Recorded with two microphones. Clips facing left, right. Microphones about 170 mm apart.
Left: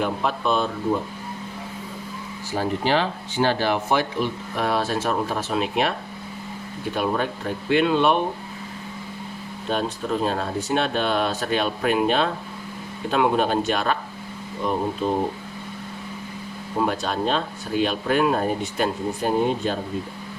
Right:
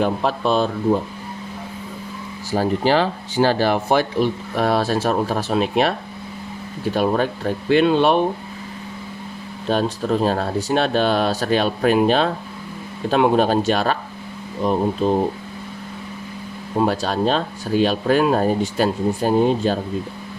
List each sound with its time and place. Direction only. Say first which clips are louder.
0.0 s speech: right 4 dB; 35° right (ahead or behind)
2.5 s speech: right 5 dB; 35° right (ahead or behind)
6.9 s speech: right 5 dB; 35° right (ahead or behind)
9.6 s speech: right 5 dB; 35° right (ahead or behind)
16.8 s speech: right 4 dB; 35° right (ahead or behind)